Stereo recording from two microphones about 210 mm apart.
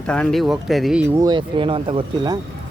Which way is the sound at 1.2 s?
20° right (ahead or behind).